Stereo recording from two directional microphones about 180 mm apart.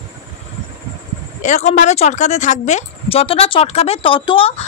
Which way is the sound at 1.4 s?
40° left (ahead or behind).